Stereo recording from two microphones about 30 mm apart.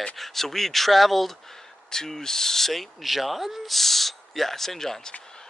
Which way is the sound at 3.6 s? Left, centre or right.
Centre.